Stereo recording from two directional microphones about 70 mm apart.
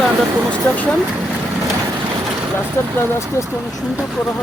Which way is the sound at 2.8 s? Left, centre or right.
Left.